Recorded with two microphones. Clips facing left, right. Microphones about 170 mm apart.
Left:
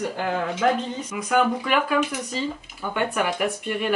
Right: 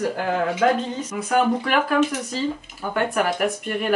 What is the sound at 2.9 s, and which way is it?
Speech, centre (ahead or behind).